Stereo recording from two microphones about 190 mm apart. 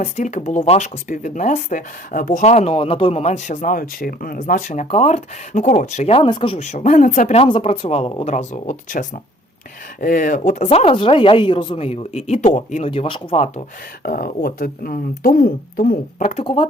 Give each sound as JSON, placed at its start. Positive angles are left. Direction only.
{"t": 0.0, "sound": "speech", "side_deg": 40}
{"t": 14.0, "sound": "speech", "side_deg": 50}